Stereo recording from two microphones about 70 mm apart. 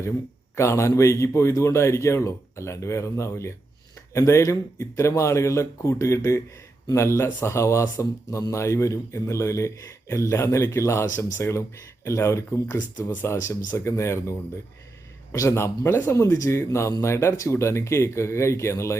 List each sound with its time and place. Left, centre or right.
0.5 s speech: left